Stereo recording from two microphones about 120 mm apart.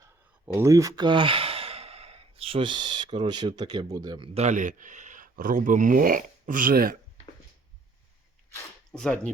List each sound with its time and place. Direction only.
0.4 s a man's voice: 20° right (ahead or behind); by 4.3 s 35° right (ahead or behind)
4.4 s speech: 80° right
8.9 s speech: 5° left (ahead or behind)